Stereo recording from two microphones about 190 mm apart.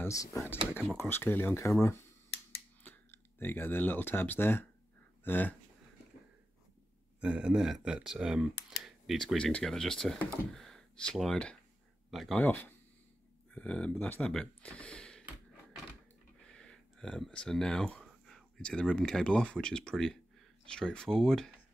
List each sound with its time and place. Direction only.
0.0 s speech: 15° left (ahead or behind)
7.2 s speech: 5° right (ahead or behind)
16.5 s speech: 5° left (ahead or behind)